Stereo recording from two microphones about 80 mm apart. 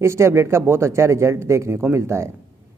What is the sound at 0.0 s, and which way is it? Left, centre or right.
Speech, right.